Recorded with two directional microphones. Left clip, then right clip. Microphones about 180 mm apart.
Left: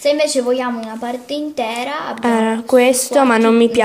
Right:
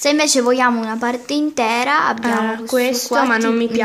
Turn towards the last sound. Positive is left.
turn(degrees=20)  # may be behind; listen again after turning